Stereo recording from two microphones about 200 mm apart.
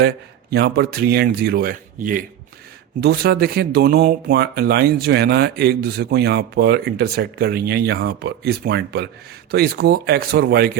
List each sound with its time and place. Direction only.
0.5 s speech: 55° right (ahead or behind)
3.0 s speech: 55° right (ahead or behind)